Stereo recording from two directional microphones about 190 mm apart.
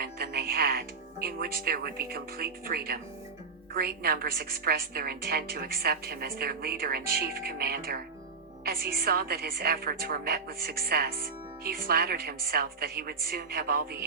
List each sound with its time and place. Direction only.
0.0 s music: 55° right (ahead or behind)
3.8 s a woman's voice: 55° right (ahead or behind)